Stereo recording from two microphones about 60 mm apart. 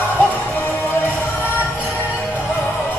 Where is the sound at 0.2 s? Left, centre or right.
Left.